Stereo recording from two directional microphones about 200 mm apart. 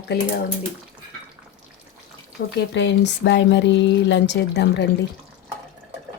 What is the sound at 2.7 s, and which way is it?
Speech, 60° left (ahead or behind).